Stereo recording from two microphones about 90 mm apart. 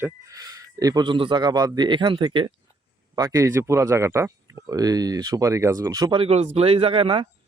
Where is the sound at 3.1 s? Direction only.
40° right (ahead or behind).